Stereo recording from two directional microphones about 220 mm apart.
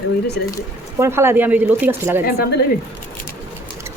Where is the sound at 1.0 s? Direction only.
10° right (ahead or behind).